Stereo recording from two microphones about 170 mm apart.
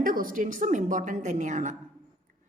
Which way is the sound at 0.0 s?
55° right (ahead or behind).